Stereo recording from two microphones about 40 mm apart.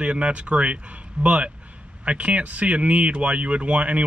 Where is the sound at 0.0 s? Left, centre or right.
Right.